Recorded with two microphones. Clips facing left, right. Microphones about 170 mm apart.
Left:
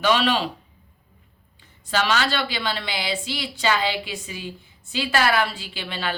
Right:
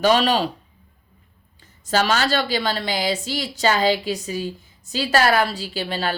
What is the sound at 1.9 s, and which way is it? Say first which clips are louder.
A woman's voice: right 3 dB; 40° right (ahead or behind).